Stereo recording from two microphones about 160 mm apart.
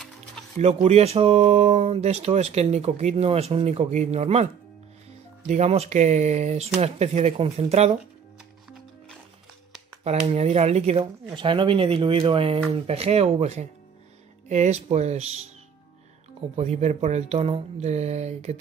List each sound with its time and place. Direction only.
0.4 s music: 5° left (ahead or behind)
0.8 s speech: 40° right (ahead or behind)
5.5 s speech: 45° right (ahead or behind)
10.0 s speech: 40° right (ahead or behind)
16.5 s speech: 45° right (ahead or behind)